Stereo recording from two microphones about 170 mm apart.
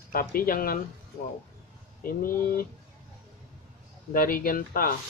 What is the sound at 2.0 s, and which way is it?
Speech, 55° left (ahead or behind).